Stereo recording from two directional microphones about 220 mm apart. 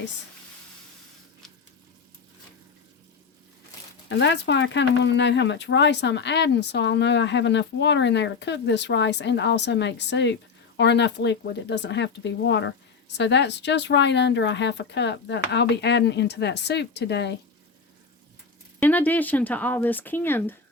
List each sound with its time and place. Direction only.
4.1 s speech: 55° left (ahead or behind)
18.8 s speech: 10° left (ahead or behind)